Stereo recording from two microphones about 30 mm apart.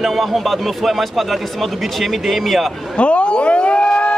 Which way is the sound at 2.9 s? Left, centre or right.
Left.